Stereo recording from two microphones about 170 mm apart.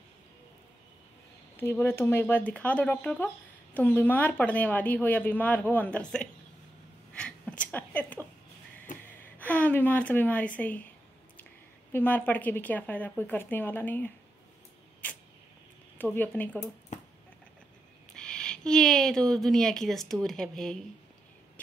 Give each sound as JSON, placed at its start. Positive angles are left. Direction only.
{"t": 1.6, "sound": "speech", "side_deg": 15}
{"t": 7.2, "sound": "a sound", "side_deg": 5}
{"t": 8.9, "sound": "gasp", "side_deg": 50}
{"t": 9.4, "sound": "speech", "side_deg": 10}
{"t": 11.9, "sound": "speech", "side_deg": 10}
{"t": 15.0, "sound": "a sound", "side_deg": 10}
{"t": 16.0, "sound": "speech", "side_deg": 10}
{"t": 18.1, "sound": "a woman's voice", "side_deg": 5}